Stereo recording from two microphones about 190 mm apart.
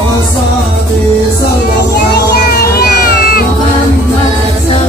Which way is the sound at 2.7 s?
50° left (ahead or behind).